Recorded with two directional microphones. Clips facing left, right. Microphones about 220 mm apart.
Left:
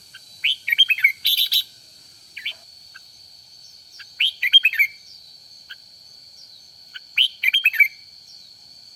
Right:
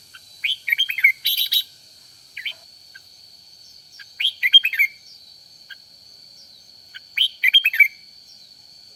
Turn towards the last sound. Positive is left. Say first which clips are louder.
# right 2 dB
turn(degrees=-5)  # may be behind; listen again after turning